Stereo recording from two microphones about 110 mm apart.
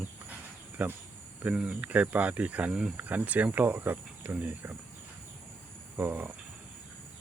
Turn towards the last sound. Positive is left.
turn(degrees=-15)  # may be behind; listen again after turning